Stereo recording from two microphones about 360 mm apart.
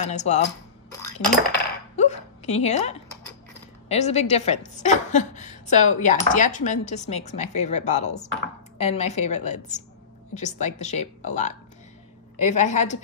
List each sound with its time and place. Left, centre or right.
0.0 s a woman's voice: centre
2.0 s a woman's voice: centre